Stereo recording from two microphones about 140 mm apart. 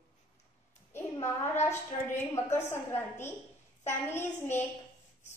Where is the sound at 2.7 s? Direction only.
15° left (ahead or behind).